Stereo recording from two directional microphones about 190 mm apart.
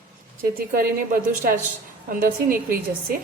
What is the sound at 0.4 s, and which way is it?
A woman's voice, 50° right (ahead or behind).